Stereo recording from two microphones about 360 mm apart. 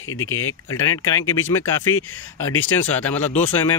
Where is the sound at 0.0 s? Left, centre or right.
Left.